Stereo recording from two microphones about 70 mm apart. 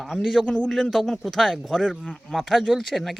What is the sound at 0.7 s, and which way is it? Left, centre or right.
Speech, centre.